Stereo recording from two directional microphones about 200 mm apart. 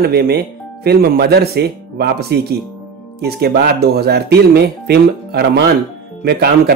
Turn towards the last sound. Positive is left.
turn(degrees=-50)  # may be behind; listen again after turning